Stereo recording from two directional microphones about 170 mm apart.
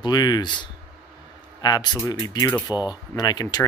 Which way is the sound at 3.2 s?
25° left (ahead or behind).